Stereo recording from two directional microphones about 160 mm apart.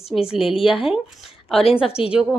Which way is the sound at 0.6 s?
5° right (ahead or behind).